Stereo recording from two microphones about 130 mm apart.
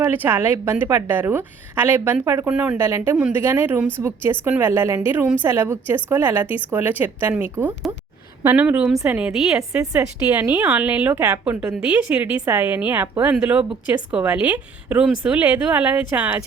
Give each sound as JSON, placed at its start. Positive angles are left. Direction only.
{"t": 0.0, "sound": "a woman's voice", "side_deg": -15}
{"t": 2.5, "sound": "a woman's voice", "side_deg": -5}
{"t": 2.7, "sound": "a woman's voice", "side_deg": -20}
{"t": 9.9, "sound": "a woman's voice", "side_deg": -15}